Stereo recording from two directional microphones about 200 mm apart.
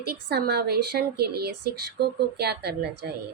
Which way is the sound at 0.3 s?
55° right (ahead or behind).